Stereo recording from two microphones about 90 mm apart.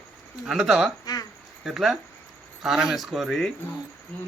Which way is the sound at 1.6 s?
5° right (ahead or behind).